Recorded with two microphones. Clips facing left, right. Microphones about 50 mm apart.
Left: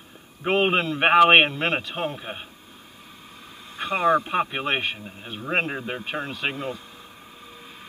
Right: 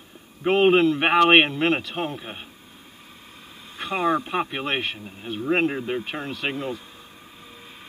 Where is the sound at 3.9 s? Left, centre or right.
Left.